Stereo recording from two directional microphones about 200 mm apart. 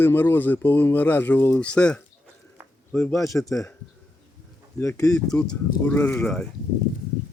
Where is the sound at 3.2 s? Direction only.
15° left (ahead or behind).